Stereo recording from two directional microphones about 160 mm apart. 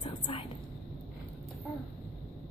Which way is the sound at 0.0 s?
35° left (ahead or behind).